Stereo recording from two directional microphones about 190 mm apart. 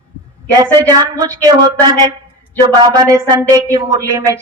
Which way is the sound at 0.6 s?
20° right (ahead or behind).